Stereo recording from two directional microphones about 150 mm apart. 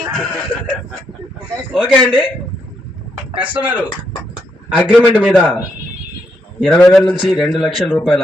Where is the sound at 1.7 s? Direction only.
5° right (ahead or behind).